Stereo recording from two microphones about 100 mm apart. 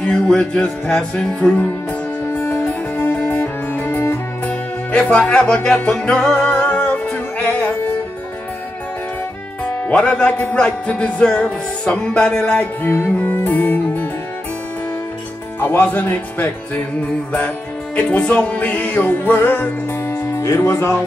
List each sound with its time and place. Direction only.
0.0 s music: 10° left (ahead or behind)
2.3 s music: 30° left (ahead or behind)
2.6 s music: 15° left (ahead or behind)
9.7 s music: 15° left (ahead or behind)
12.8 s music: 20° left (ahead or behind)
15.6 s music: 20° left (ahead or behind)
17.9 s music: 10° left (ahead or behind)
20.3 s speech: 30° left (ahead or behind)